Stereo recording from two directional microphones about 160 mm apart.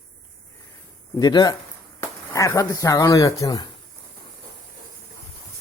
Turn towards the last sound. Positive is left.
turn(degrees=25)  # may be behind; listen again after turning